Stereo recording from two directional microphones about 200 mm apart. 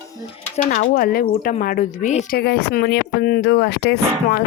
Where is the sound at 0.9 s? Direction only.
45° left (ahead or behind).